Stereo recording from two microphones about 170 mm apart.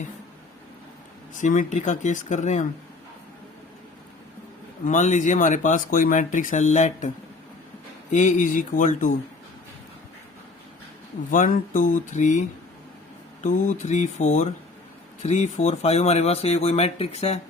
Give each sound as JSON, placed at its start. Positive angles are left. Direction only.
{"t": 1.4, "sound": "speech", "side_deg": 45}
{"t": 4.9, "sound": "speech", "side_deg": 45}
{"t": 8.1, "sound": "speech", "side_deg": 45}
{"t": 11.3, "sound": "speech", "side_deg": 50}